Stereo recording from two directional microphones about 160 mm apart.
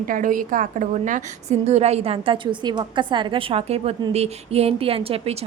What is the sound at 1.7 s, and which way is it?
A woman's voice, 40° right (ahead or behind).